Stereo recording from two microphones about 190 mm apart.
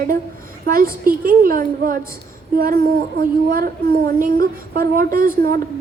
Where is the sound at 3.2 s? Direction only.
50° right (ahead or behind).